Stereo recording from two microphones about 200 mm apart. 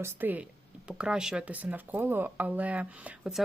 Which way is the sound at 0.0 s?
10° right (ahead or behind).